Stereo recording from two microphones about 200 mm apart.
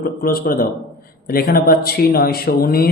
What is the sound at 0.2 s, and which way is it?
Speech, 50° left (ahead or behind).